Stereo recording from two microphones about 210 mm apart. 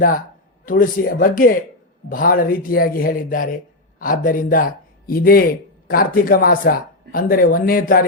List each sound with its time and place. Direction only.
0.6 s speech: 40° left (ahead or behind)